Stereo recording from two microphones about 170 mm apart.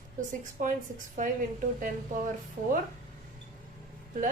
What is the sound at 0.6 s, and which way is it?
Speech, 50° right (ahead or behind).